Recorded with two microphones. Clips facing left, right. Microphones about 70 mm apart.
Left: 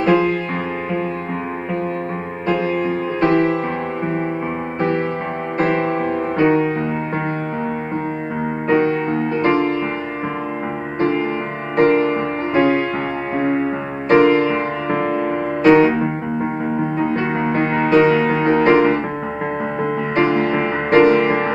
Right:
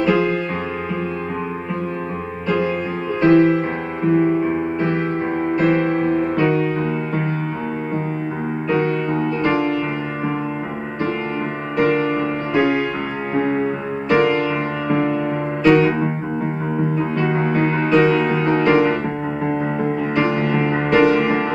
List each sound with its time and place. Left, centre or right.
0.0 s music: left
3.2 s music: left
8.6 s music: left
11.7 s music: left
13.3 s music: left
14.0 s music: left
17.1 s music: left